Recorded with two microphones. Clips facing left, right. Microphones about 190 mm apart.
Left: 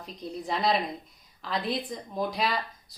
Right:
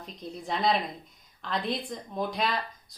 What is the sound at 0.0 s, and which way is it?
Speech, centre (ahead or behind).